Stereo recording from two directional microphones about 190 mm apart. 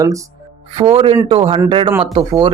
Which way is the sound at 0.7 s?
30° right (ahead or behind).